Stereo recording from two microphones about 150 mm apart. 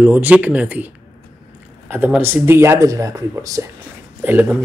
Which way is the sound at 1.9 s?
10° right (ahead or behind).